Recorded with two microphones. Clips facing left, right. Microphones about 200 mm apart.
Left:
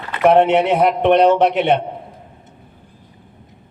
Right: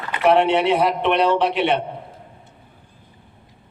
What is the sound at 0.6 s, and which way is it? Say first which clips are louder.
Speech: left 4 dB; 50° left (ahead or behind).